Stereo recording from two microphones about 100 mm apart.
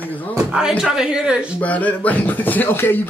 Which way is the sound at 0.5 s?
5° right (ahead or behind).